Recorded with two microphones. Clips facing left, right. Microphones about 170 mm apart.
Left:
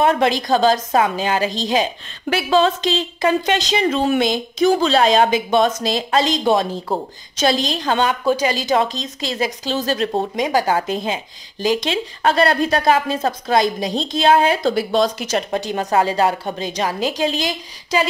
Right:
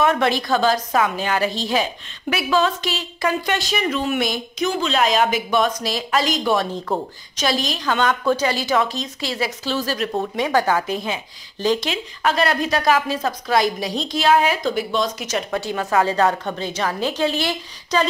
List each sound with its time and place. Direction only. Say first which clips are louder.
0.0 s a woman's voice: left 2 dB; 30° left (ahead or behind)
2.2 s a woman's voice: left 3 dB; 30° left (ahead or behind)
6.6 s a woman's voice: left 1 dB; 15° left (ahead or behind)
7.3 s a woman's voice: left 4 dB; 25° left (ahead or behind)
8.0 s a woman's voice: even; 15° left (ahead or behind)
10.3 s a woman's voice: left 1 dB; 15° left (ahead or behind)
10.7 s a woman's voice: left 2 dB; 30° left (ahead or behind)
11.6 s a woman's voice: left 1 dB; 10° left (ahead or behind)
11.9 s a woman's voice: left 3 dB; 30° left (ahead or behind)
16.0 s a woman's voice: even; 15° left (ahead or behind)